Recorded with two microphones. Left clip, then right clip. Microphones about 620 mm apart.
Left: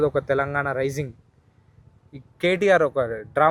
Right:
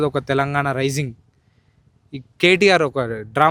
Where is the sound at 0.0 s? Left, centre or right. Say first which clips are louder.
Right 2 dB; right.